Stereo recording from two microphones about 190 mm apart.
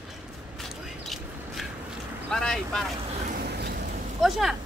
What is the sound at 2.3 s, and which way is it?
Speech, 5° left (ahead or behind).